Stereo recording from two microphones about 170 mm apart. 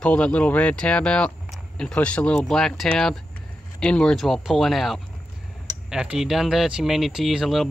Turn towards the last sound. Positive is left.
turn(degrees=0)  # may be behind; listen again after turning